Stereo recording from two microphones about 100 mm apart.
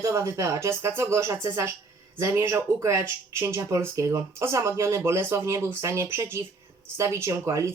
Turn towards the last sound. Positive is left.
turn(degrees=-30)  # may be behind; listen again after turning